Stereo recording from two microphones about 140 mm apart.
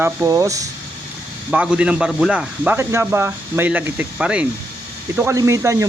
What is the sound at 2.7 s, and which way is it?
Speech, 20° right (ahead or behind).